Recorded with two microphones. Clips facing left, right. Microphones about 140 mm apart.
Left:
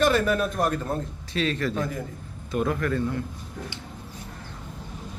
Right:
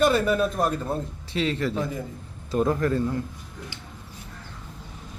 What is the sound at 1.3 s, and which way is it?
A man's voice, 20° right (ahead or behind).